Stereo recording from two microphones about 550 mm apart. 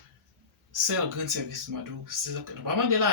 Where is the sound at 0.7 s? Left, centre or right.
Right.